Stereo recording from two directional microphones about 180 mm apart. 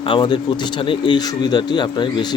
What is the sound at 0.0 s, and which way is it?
A man's voice, 30° left (ahead or behind).